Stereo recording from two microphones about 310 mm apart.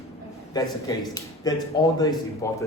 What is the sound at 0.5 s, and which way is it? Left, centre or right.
A man's voice, centre.